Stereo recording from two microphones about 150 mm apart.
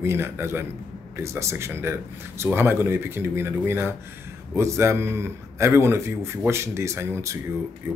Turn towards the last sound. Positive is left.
turn(degrees=-15)  # may be behind; listen again after turning